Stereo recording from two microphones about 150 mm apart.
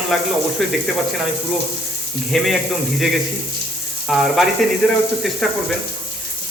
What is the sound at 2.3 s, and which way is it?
Speech, centre (ahead or behind).